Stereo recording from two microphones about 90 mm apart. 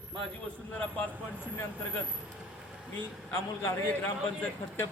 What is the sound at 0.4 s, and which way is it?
Speech, 15° left (ahead or behind).